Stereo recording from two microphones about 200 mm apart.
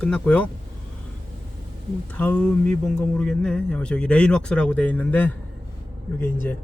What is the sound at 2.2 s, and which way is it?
Speech, 10° left (ahead or behind).